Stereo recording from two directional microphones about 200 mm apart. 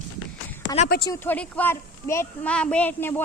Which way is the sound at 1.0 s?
15° left (ahead or behind).